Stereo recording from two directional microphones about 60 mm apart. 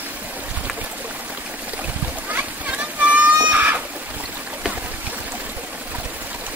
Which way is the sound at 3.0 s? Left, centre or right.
Right.